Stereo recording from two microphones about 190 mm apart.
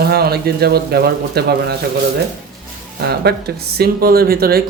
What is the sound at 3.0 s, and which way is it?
Speech, 55° right (ahead or behind).